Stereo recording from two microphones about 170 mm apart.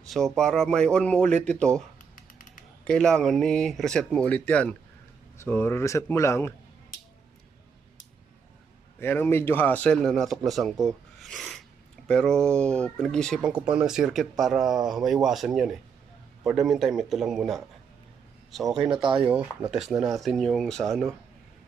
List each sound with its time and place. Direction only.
0.0 s a sound: centre (ahead or behind)
0.4 s a man's voice: 5° left (ahead or behind)
9.0 s a man's voice: 10° left (ahead or behind)
10.9 s rub: centre (ahead or behind)
12.1 s speech: 5° left (ahead or behind)
18.9 s speech: 30° right (ahead or behind)
19.2 s speech: 10° right (ahead or behind)